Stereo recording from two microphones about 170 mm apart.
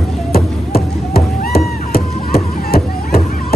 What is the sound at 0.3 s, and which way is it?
Music, 65° left (ahead or behind).